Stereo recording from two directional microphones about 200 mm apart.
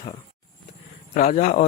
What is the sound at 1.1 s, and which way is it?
Speech, 40° left (ahead or behind).